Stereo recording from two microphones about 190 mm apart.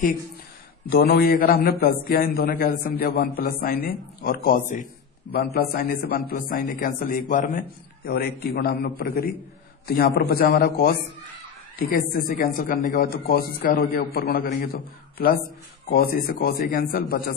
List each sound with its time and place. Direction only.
0.8 s a man's voice: 55° left (ahead or behind)